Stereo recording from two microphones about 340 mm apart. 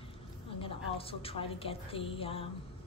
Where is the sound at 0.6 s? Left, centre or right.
Centre.